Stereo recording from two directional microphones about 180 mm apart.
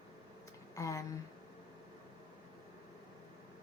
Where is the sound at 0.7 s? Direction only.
15° left (ahead or behind).